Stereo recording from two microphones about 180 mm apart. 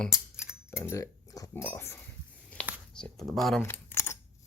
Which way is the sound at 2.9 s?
5° left (ahead or behind).